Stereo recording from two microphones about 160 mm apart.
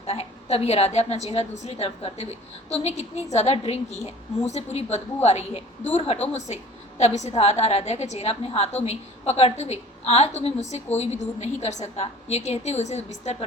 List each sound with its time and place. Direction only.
0.0 s a woman's voice: 40° left (ahead or behind)